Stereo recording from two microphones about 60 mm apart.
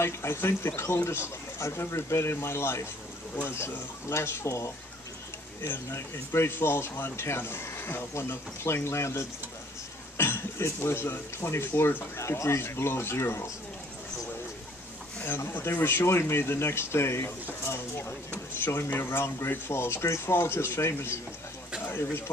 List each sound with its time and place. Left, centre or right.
0.0 s speech: left
12.2 s speech: left
15.2 s speech: left